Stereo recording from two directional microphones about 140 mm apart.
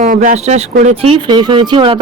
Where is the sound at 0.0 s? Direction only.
65° right (ahead or behind).